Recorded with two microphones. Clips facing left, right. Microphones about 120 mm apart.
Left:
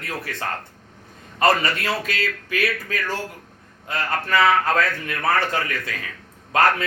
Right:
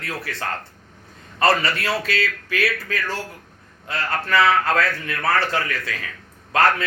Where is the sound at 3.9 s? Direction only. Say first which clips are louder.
Even; 20° left (ahead or behind).